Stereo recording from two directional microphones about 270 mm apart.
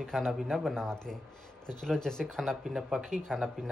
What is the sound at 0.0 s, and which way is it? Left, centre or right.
Speech, centre.